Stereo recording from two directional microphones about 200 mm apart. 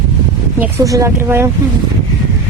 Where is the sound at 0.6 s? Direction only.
15° right (ahead or behind).